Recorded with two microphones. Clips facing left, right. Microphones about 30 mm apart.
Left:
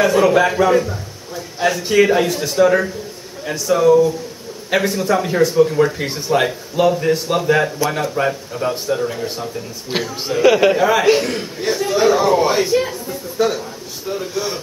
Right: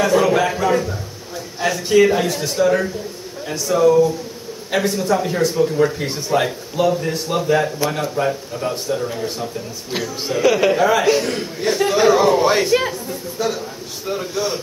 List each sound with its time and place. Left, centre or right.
0.0 s a man's voice: centre
9.8 s a woman's voice: left
10.2 s a man's voice: centre
11.2 s speech: centre
11.8 s a man's voice: centre
12.4 s a man's voice: centre
13.0 s speech: centre